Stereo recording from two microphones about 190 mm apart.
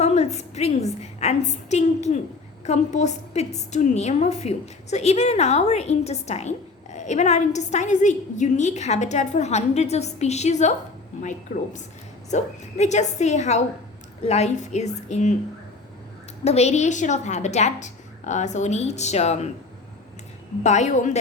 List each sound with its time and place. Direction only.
0.0 s a woman's voice: 35° left (ahead or behind)
16.4 s a woman's voice: 35° left (ahead or behind)
20.7 s a woman's voice: 35° left (ahead or behind)